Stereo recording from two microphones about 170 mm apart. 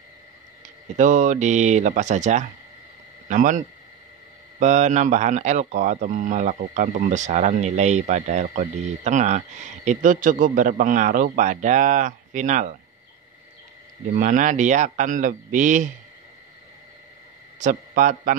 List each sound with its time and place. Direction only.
0.9 s a man's voice: 45° right (ahead or behind)
14.1 s a man's voice: 50° right (ahead or behind)
17.6 s a man's voice: 50° right (ahead or behind)